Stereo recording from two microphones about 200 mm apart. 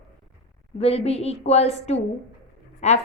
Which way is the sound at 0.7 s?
30° left (ahead or behind).